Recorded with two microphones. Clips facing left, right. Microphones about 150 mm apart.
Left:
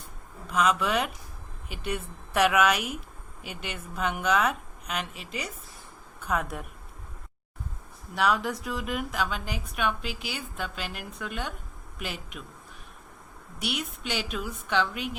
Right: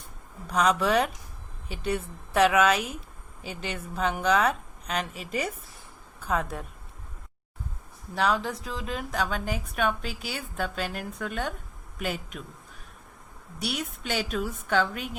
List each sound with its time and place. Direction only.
0.5 s a woman's voice: 35° right (ahead or behind)
6.1 s a woman's voice: 30° right (ahead or behind)
8.1 s a woman's voice: 30° right (ahead or behind)
13.7 s a woman's voice: 45° right (ahead or behind)